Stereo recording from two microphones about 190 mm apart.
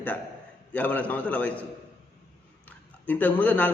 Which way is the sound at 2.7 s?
10° left (ahead or behind).